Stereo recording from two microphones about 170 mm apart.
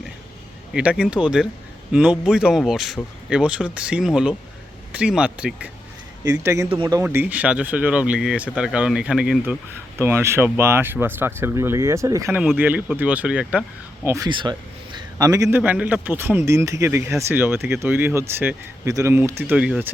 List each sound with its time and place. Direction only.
0.7 s a man's voice: 5° right (ahead or behind)
6.7 s speech: 25° right (ahead or behind)
7.0 s a man's voice: 15° right (ahead or behind)
12.4 s a man's voice: 10° right (ahead or behind)
14.5 s a man's voice: 25° right (ahead or behind); by 19.9 s 5° right (ahead or behind)